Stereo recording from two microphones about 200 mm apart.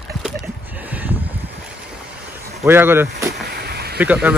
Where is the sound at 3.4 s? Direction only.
55° right (ahead or behind).